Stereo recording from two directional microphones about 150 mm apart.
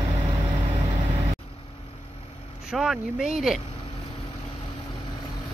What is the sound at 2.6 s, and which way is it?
Speech, centre (ahead or behind).